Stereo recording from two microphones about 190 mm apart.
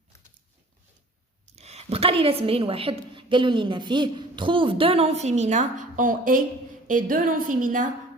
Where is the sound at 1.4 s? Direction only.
35° right (ahead or behind).